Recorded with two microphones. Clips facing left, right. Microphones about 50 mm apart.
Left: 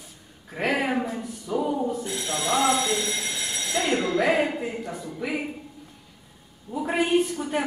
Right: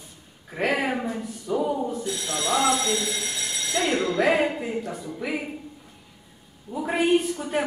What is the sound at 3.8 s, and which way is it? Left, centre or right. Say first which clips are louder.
A woman's voice: even; centre.